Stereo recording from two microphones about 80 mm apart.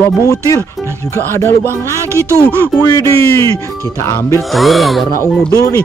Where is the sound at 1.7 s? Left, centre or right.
Right.